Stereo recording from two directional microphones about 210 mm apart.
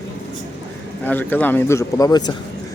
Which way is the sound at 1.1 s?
10° left (ahead or behind).